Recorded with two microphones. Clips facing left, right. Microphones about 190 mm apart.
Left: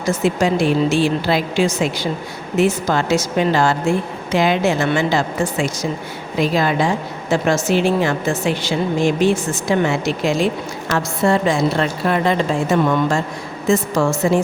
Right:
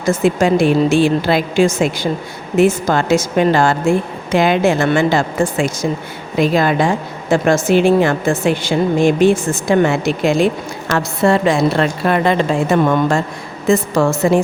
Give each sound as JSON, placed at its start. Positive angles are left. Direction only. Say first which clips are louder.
{"t": 0.0, "sound": "a woman's voice", "louder": "right 3 dB", "side_deg": -50}
{"t": 10.9, "sound": "a woman's voice", "louder": "right 3 dB", "side_deg": -65}